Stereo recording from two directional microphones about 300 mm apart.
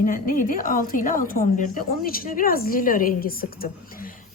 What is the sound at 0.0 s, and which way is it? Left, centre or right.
A woman's voice, left.